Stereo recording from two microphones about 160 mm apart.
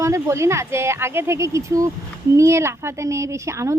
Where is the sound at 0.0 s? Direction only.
20° right (ahead or behind).